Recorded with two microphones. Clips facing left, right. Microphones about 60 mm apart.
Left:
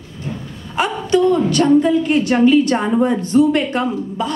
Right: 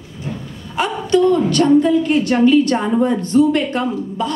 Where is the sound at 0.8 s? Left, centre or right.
Left.